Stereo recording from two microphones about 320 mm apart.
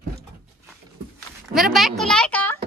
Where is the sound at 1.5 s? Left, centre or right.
Centre.